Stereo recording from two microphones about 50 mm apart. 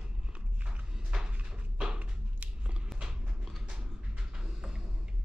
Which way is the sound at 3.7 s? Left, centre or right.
Centre.